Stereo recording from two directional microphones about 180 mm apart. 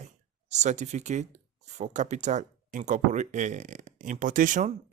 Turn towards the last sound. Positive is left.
turn(degrees=-45)  # may be behind; listen again after turning